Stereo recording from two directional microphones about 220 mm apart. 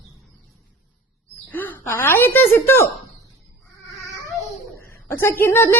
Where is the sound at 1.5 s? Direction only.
10° left (ahead or behind).